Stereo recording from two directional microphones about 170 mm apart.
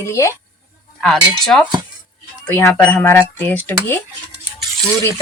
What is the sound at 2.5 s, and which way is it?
Speech, 10° left (ahead or behind).